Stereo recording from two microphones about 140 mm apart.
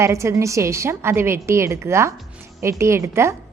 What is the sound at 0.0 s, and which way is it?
A woman's voice, 20° right (ahead or behind).